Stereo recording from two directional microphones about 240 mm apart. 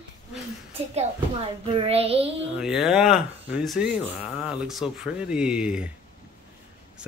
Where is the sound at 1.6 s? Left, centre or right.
Right.